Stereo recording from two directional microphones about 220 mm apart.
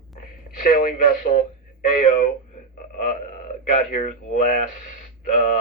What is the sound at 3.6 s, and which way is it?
Speech, 35° left (ahead or behind).